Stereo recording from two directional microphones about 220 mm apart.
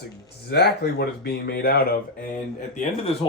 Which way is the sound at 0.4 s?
45° left (ahead or behind).